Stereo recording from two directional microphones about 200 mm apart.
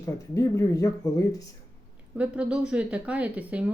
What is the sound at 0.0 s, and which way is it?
Speech, 15° left (ahead or behind).